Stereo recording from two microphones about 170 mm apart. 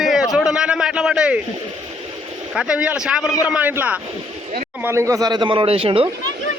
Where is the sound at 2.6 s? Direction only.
5° right (ahead or behind); by 6.1 s 35° right (ahead or behind).